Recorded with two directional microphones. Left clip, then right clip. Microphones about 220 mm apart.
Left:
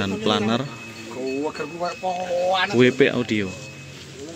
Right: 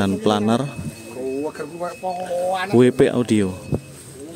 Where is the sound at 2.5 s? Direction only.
30° right (ahead or behind).